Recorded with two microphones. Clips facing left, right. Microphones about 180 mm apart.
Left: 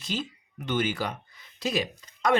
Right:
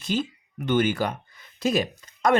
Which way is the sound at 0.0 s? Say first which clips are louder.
Right 6 dB; 55° right (ahead or behind).